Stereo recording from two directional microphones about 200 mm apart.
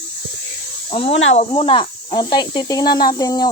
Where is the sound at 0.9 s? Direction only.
30° left (ahead or behind).